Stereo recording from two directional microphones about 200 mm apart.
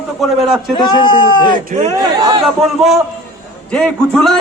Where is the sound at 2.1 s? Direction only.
25° right (ahead or behind).